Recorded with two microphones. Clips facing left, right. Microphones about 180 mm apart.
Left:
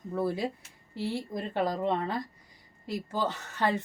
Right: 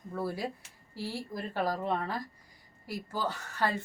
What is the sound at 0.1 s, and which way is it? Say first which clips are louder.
A woman's voice: left 4 dB; 20° left (ahead or behind).